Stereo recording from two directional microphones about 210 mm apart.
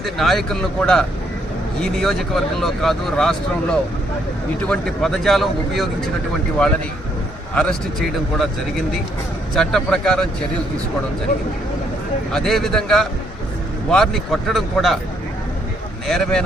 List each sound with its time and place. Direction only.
0.0 s speech: centre (ahead or behind)
7.5 s speech: 5° left (ahead or behind)
9.6 s speech: centre (ahead or behind)
12.3 s speech: centre (ahead or behind)
16.0 s speech: centre (ahead or behind)